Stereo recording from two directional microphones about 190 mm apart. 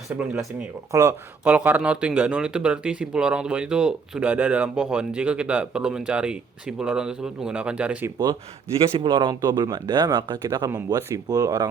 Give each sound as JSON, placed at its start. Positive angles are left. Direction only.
{"t": 0.1, "sound": "speech", "side_deg": -5}
{"t": 8.8, "sound": "speech", "side_deg": -30}